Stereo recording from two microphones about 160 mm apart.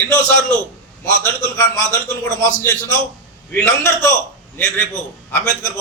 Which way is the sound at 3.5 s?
15° left (ahead or behind).